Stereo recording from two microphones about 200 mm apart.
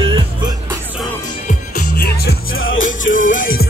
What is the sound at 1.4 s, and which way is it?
Music, 50° left (ahead or behind).